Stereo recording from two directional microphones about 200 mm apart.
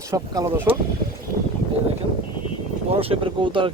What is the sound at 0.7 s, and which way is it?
Speech, 30° right (ahead or behind).